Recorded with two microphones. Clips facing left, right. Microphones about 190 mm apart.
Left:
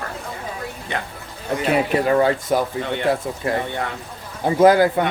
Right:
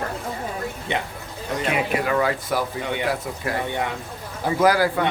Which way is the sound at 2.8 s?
10° right (ahead or behind).